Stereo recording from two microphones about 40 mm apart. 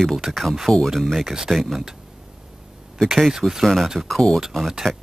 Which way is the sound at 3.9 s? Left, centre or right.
Centre.